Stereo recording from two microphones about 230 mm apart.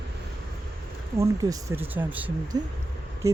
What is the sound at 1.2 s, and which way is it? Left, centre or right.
Speech, centre.